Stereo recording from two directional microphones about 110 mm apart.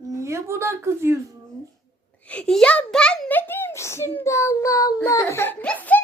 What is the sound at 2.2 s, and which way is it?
A child's voice, 10° left (ahead or behind).